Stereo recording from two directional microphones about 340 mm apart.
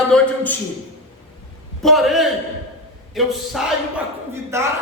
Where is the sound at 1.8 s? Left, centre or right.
Centre.